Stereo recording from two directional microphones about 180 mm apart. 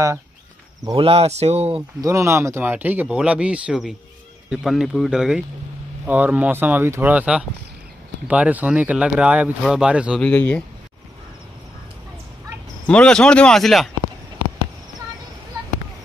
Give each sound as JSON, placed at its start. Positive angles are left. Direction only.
{"t": 0.8, "sound": "speech", "side_deg": -30}
{"t": 2.0, "sound": "speech", "side_deg": -15}
{"t": 10.2, "sound": "speech", "side_deg": 10}
{"t": 12.8, "sound": "speech", "side_deg": 5}